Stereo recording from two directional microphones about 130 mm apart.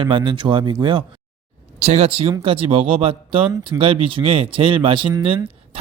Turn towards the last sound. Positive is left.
turn(degrees=-45)  # may be behind; listen again after turning